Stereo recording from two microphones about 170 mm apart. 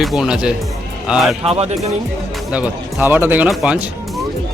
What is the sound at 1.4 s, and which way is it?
Speech, 35° right (ahead or behind).